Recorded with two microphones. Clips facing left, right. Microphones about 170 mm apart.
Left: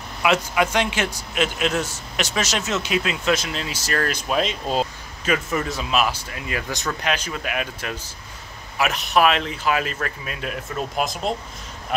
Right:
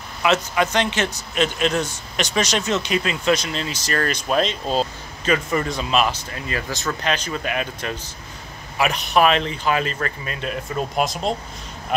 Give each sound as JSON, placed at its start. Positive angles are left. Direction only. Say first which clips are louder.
{"t": 0.2, "sound": "a man's voice", "louder": "right 1 dB", "side_deg": 10}